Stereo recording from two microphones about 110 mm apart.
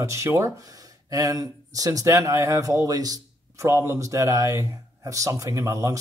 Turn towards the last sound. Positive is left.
turn(degrees=-30)  # may be behind; listen again after turning